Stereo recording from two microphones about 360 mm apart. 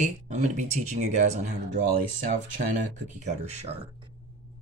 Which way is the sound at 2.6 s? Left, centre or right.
Centre.